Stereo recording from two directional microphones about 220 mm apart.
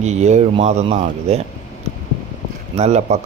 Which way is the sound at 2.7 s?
30° right (ahead or behind).